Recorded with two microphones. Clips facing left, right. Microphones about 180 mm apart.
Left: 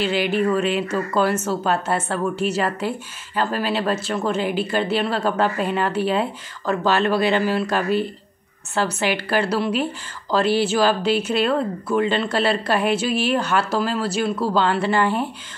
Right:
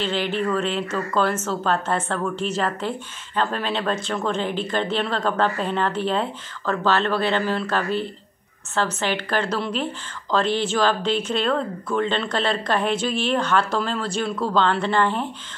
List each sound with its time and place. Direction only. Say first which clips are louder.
0.0 s speech: left 4 dB; 10° left (ahead or behind)